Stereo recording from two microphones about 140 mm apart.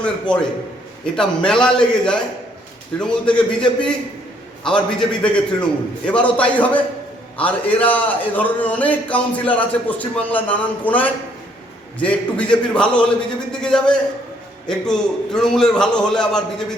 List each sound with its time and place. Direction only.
0.0 s a man's voice: 5° left (ahead or behind)